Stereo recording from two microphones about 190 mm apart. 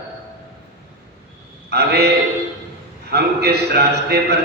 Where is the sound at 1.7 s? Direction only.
60° right (ahead or behind).